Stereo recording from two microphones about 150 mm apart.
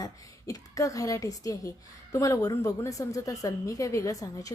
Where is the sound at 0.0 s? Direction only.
25° left (ahead or behind).